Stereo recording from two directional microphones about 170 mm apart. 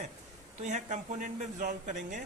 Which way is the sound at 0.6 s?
45° right (ahead or behind).